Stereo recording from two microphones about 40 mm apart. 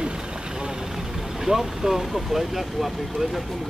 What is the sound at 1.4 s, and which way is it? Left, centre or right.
Speech, centre.